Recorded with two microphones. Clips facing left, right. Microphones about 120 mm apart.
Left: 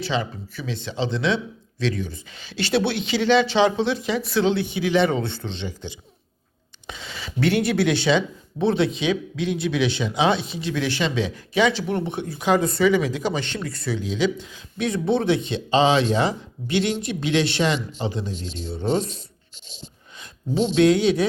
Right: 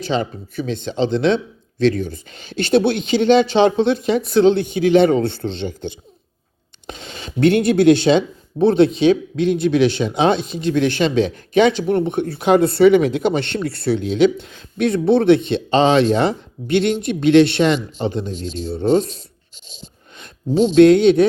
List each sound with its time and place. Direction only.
0.0 s speech: 50° right (ahead or behind)
7.3 s speech: 55° right (ahead or behind)
20.1 s a sound: 60° right (ahead or behind)
20.8 s speech: 55° right (ahead or behind)